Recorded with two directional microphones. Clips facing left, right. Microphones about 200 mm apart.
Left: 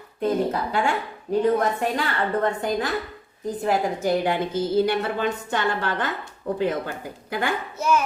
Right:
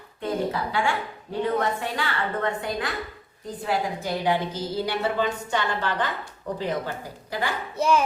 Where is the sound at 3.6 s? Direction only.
50° left (ahead or behind).